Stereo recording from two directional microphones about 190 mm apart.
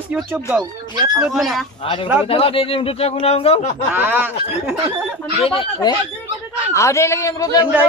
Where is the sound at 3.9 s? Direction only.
10° right (ahead or behind).